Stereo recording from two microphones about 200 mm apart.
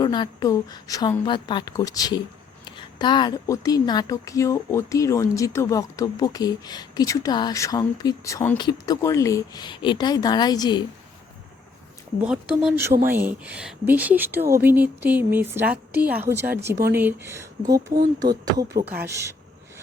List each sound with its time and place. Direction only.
0.0 s a woman's voice: 20° left (ahead or behind)
12.2 s speech: 5° right (ahead or behind)